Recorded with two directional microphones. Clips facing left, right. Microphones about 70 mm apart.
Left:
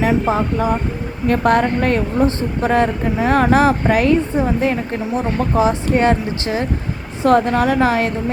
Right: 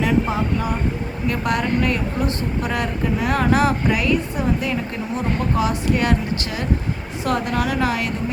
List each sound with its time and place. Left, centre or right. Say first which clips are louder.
0.1 s a woman's voice: left 3 dB; left